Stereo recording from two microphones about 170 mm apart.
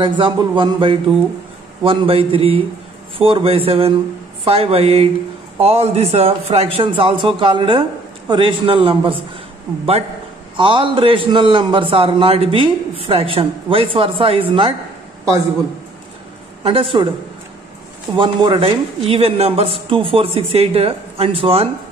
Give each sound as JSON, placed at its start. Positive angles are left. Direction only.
{"t": 0.0, "sound": "a man's voice", "side_deg": -30}
{"t": 10.5, "sound": "a man's voice", "side_deg": -30}
{"t": 16.6, "sound": "a man's voice", "side_deg": -30}
{"t": 18.1, "sound": "a man's voice", "side_deg": -30}